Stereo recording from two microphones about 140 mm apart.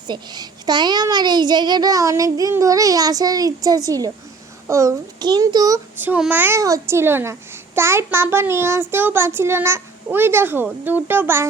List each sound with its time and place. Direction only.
0.1 s a child's voice: 30° right (ahead or behind)
6.0 s a child's voice: 10° right (ahead or behind)